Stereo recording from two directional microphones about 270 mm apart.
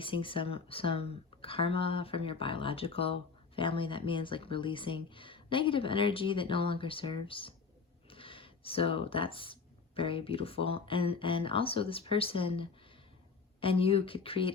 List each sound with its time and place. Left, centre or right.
0.0 s speech: centre